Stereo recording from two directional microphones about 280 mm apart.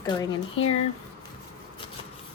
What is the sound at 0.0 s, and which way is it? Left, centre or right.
Speech, centre.